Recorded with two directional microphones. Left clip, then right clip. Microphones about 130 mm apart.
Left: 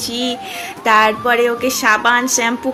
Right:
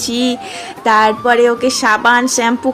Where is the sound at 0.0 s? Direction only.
60° right (ahead or behind).